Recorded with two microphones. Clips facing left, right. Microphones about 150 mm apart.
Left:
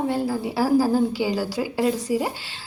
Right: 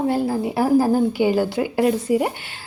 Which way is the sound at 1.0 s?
55° right (ahead or behind).